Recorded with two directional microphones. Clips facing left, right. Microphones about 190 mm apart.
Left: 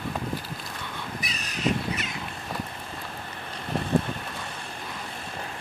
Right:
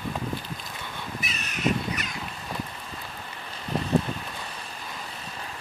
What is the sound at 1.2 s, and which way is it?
Crow, 35° left (ahead or behind).